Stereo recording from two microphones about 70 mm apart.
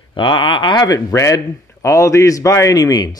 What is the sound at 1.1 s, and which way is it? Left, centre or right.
A man's voice, left.